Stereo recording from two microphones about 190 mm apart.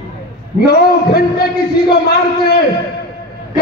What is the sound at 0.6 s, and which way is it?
A man's voice, 55° left (ahead or behind).